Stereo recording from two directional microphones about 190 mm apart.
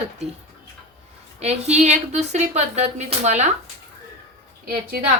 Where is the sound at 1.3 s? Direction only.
35° right (ahead or behind).